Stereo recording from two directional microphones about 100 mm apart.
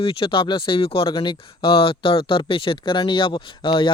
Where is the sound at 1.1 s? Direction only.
50° left (ahead or behind).